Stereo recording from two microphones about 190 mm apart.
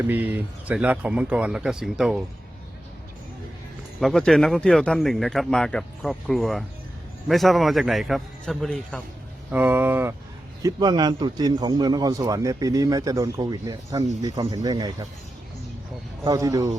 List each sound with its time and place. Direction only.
0.0 s speech: 10° right (ahead or behind)
4.0 s speech: 5° left (ahead or behind)
9.5 s speech: 10° right (ahead or behind)
10.6 s a man's voice: 20° right (ahead or behind)
16.2 s speech: 20° right (ahead or behind)